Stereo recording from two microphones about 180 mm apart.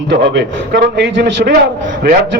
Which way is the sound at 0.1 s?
65° right (ahead or behind).